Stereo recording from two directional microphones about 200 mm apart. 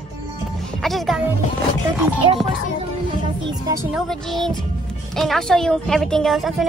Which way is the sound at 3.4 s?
20° right (ahead or behind).